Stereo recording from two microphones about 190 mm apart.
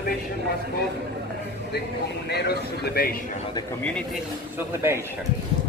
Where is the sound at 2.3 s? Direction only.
60° left (ahead or behind).